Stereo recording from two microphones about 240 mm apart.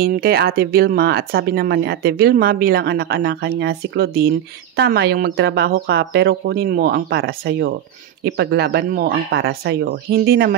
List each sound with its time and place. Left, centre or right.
0.0 s speech: right